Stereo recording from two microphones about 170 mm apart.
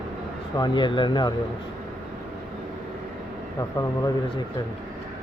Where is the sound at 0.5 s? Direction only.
25° left (ahead or behind).